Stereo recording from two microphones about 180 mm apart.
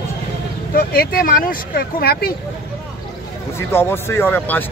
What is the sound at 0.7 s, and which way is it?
Speech, 55° left (ahead or behind).